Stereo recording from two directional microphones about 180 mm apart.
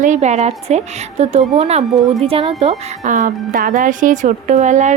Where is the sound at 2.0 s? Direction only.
Centre (ahead or behind).